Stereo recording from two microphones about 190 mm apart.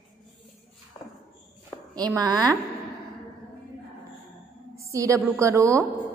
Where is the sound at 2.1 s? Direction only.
20° right (ahead or behind).